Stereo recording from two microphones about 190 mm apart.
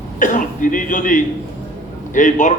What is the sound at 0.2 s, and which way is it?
A man's voice, 45° left (ahead or behind).